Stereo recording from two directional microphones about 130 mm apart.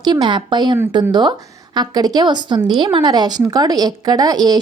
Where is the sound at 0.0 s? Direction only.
35° right (ahead or behind).